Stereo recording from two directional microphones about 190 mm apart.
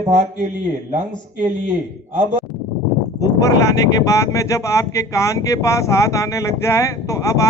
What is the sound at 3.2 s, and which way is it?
Speech, 15° left (ahead or behind).